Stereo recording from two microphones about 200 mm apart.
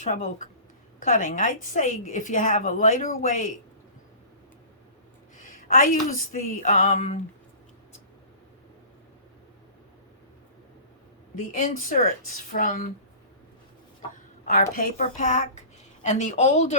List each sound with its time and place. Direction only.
0.0 s a woman's voice: 40° left (ahead or behind)
5.4 s a woman's voice: 40° left (ahead or behind)
11.3 s a woman's voice: 40° left (ahead or behind)
14.4 s a woman's voice: 40° left (ahead or behind)